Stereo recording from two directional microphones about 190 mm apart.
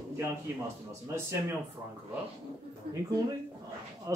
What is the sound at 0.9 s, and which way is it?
Speech, 15° right (ahead or behind).